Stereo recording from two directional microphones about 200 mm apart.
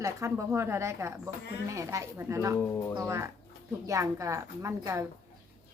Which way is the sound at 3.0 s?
15° right (ahead or behind).